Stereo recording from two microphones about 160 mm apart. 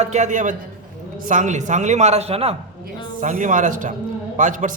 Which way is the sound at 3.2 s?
50° right (ahead or behind).